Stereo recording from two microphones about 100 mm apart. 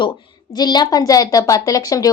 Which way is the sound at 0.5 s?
45° left (ahead or behind).